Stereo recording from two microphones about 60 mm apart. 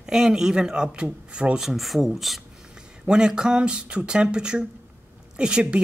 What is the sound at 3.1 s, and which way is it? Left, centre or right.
A woman's voice, centre.